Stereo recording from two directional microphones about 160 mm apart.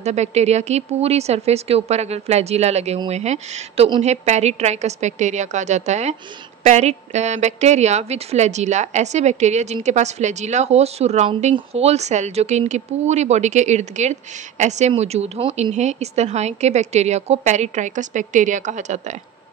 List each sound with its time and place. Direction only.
0.0 s a woman's voice: 45° right (ahead or behind)